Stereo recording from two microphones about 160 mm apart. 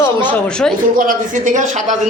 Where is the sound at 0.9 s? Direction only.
55° right (ahead or behind).